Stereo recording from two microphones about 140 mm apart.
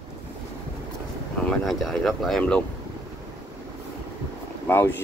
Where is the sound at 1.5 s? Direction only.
Centre (ahead or behind).